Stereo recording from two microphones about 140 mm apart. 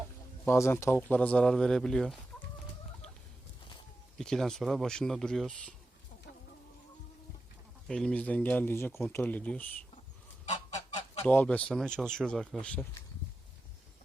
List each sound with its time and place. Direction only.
0.4 s speech: 20° left (ahead or behind)
4.2 s speech: 5° left (ahead or behind)
7.9 s speech: 5° left (ahead or behind)
11.3 s speech: 10° left (ahead or behind)